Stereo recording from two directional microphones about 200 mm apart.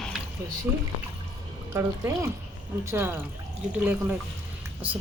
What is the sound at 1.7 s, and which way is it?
Speech, 15° right (ahead or behind).